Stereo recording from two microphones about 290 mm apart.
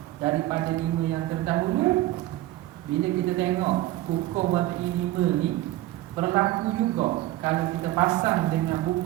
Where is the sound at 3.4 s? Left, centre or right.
Centre.